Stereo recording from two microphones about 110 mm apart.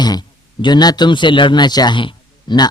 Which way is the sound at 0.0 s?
40° left (ahead or behind).